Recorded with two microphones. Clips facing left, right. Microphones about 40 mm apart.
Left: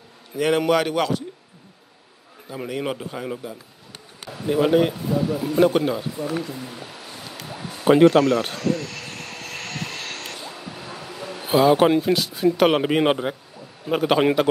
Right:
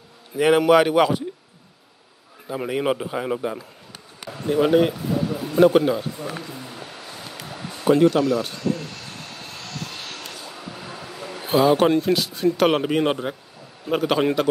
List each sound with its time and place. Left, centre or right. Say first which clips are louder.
0.4 s a man's voice: right 4 dB; centre
2.4 s a man's voice: right 4 dB; centre
4.3 s speech: even; centre
8.0 s speech: left 3 dB; left
8.6 s vehicle: left 2 dB; left
10.5 s a sound: even; centre
11.4 s speech: left 1 dB; centre
12.8 s a man's voice: left 2 dB; centre
13.8 s speech: left 2 dB; centre